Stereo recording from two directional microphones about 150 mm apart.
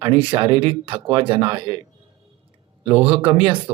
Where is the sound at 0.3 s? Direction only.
35° right (ahead or behind).